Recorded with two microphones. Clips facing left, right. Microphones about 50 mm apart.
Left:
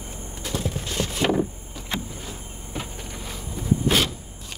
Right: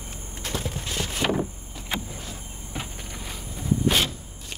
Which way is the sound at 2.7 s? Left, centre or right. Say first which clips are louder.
Left 2 dB; centre.